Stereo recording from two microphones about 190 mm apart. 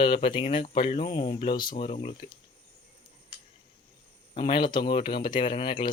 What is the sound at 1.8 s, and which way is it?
Speech, 35° left (ahead or behind).